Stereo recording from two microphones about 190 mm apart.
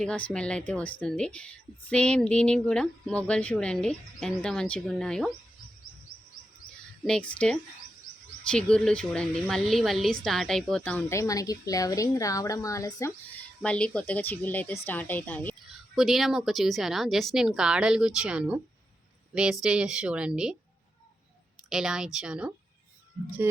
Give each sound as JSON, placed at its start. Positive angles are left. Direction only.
{"t": 0.0, "sound": "a woman's voice", "side_deg": 5}
{"t": 7.0, "sound": "a woman's voice", "side_deg": 5}
{"t": 13.6, "sound": "a woman's voice", "side_deg": 5}
{"t": 21.7, "sound": "a woman's voice", "side_deg": -5}